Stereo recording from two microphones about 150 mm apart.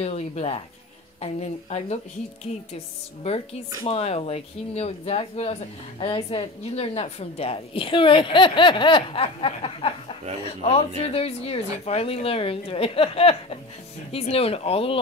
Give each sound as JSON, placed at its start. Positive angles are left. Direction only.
{"t": 0.0, "sound": "speech", "side_deg": 45}
{"t": 3.8, "sound": "speech", "side_deg": 40}